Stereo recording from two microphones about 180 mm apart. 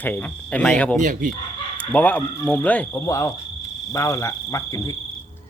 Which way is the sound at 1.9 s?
10° left (ahead or behind).